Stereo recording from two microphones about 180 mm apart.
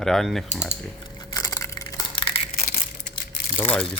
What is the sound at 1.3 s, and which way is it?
Crushing, 20° left (ahead or behind).